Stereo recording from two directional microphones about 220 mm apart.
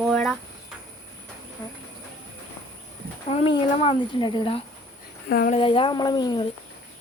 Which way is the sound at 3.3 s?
25° left (ahead or behind).